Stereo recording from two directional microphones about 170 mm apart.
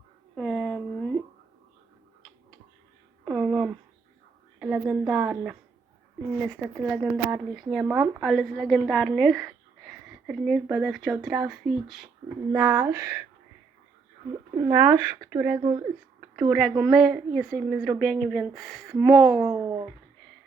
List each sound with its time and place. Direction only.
0.3 s a sound: 5° left (ahead or behind)
3.2 s a sound: centre (ahead or behind)
4.6 s a woman's voice: 5° right (ahead or behind)
14.7 s speech: 10° right (ahead or behind)
16.5 s a woman's voice: centre (ahead or behind)
19.4 s speech: 20° right (ahead or behind)